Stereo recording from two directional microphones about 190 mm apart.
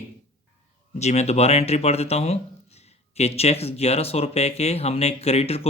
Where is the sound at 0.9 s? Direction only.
35° left (ahead or behind).